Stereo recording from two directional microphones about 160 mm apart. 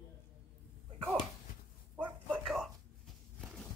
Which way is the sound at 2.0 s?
10° right (ahead or behind).